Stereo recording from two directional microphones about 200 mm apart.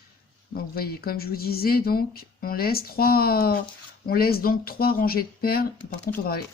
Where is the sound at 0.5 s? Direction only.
50° left (ahead or behind).